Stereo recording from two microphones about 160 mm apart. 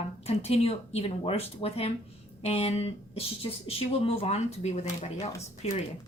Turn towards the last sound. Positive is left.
turn(degrees=45)  # may be behind; listen again after turning